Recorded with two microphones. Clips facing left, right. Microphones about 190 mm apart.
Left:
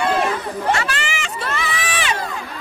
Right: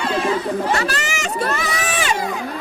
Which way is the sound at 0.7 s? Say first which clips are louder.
Right 2 dB; 40° right (ahead or behind).